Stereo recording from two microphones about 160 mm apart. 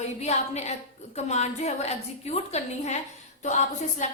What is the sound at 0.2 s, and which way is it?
A woman's voice, 45° left (ahead or behind).